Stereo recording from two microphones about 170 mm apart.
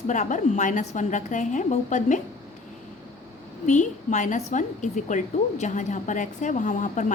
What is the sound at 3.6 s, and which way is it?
A woman's voice, 45° left (ahead or behind).